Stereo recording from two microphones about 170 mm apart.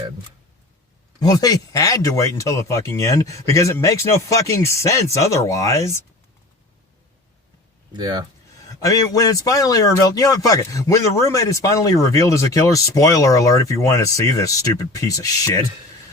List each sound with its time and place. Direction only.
1.2 s speech: 20° left (ahead or behind)
7.9 s speech: 25° right (ahead or behind)
8.8 s speech: 20° left (ahead or behind)